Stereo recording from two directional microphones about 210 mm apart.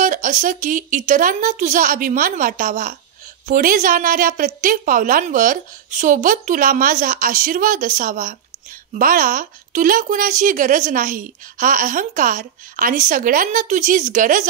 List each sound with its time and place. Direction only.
0.0 s a woman's voice: 40° right (ahead or behind)